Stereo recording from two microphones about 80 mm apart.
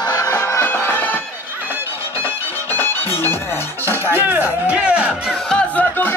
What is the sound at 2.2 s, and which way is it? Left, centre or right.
Music, left.